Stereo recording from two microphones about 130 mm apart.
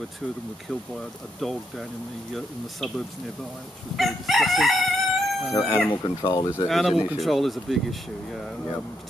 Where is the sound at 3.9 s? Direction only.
Centre (ahead or behind).